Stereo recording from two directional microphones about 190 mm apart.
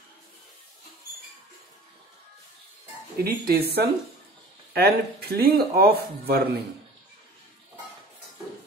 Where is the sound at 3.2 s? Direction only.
55° right (ahead or behind).